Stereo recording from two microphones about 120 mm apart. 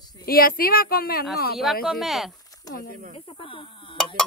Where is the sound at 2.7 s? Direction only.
30° left (ahead or behind).